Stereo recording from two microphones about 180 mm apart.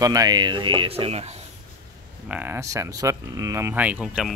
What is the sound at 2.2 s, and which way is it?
Speech, 10° right (ahead or behind).